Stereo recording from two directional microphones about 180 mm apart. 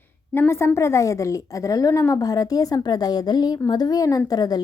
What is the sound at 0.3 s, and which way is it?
A woman's voice, 15° left (ahead or behind).